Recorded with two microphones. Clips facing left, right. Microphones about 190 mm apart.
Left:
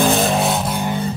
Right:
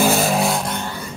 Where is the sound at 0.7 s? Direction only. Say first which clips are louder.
Left 6 dB; 15° left (ahead or behind).